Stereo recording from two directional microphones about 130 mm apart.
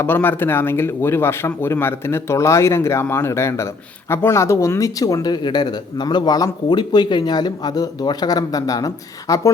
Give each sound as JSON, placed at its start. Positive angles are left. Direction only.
{"t": 0.0, "sound": "speech", "side_deg": 15}